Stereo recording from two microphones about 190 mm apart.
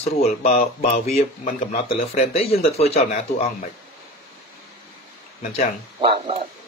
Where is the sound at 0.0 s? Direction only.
35° left (ahead or behind).